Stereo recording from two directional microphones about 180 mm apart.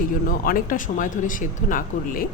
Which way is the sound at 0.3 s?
50° left (ahead or behind).